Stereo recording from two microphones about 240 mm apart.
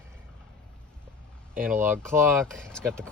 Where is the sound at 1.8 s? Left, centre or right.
Centre.